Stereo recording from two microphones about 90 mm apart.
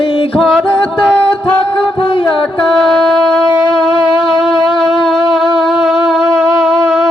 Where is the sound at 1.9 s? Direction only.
75° left (ahead or behind).